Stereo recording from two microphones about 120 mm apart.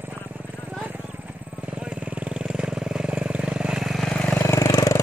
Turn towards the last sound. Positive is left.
turn(degrees=25)  # may be behind; listen again after turning